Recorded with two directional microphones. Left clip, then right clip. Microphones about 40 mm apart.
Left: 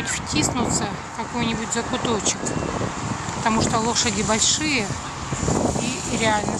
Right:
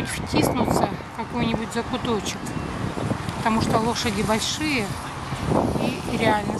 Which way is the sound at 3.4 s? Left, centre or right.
Centre.